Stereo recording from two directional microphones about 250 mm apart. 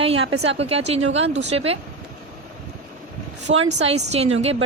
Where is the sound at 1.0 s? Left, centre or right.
Right.